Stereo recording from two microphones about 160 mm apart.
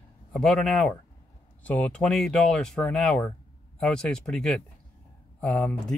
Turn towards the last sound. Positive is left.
turn(degrees=5)  # may be behind; listen again after turning